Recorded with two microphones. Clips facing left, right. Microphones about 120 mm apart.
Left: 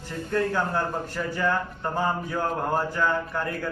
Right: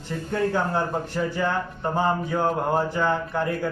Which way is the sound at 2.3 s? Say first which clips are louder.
Right 3 dB; 25° right (ahead or behind).